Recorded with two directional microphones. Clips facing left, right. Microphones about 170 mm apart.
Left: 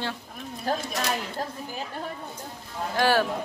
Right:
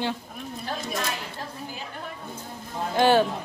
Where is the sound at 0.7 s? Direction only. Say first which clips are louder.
Left 6 dB; 45° left (ahead or behind).